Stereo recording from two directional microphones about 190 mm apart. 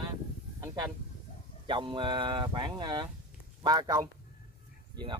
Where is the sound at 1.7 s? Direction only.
25° right (ahead or behind).